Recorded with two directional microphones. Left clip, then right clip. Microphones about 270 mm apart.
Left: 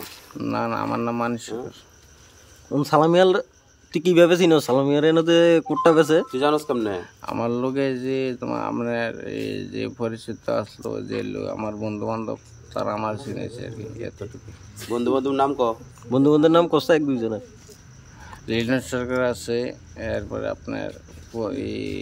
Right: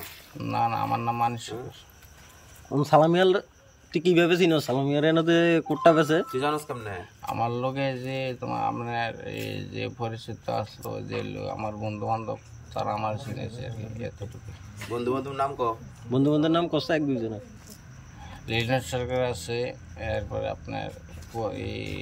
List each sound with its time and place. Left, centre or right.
0.4 s speech: centre
2.8 s speech: centre
6.3 s a man's voice: left
7.2 s speech: centre
15.0 s a man's voice: left
16.1 s speech: centre
18.3 s speech: centre